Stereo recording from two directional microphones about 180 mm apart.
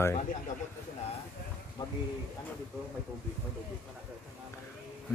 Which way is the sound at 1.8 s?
25° left (ahead or behind).